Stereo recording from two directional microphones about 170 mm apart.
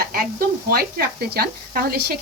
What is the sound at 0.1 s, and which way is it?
Speech, 60° right (ahead or behind).